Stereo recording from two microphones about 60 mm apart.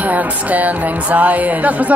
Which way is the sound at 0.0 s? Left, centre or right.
Right.